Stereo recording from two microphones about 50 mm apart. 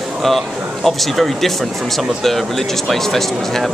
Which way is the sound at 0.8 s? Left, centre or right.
Centre.